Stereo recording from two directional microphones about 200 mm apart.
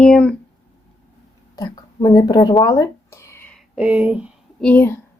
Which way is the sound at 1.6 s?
20° left (ahead or behind).